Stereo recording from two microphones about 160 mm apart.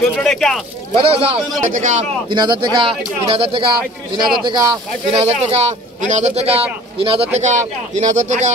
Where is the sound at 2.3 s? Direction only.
30° right (ahead or behind).